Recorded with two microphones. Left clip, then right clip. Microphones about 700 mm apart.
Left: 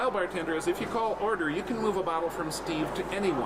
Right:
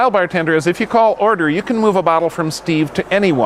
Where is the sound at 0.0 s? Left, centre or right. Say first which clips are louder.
Right 15 dB; right.